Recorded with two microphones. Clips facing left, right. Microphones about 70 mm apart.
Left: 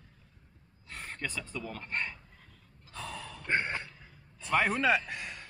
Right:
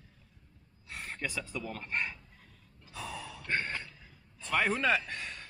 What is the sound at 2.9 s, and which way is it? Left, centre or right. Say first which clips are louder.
Sigh: even; centre.